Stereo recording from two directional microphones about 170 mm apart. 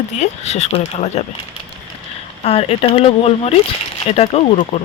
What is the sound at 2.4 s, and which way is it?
Speech, 35° left (ahead or behind).